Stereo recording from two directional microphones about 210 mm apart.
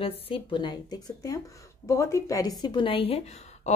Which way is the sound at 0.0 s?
25° left (ahead or behind).